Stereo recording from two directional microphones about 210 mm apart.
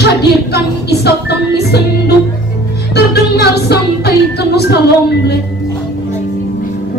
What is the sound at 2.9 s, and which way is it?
Music, 50° left (ahead or behind).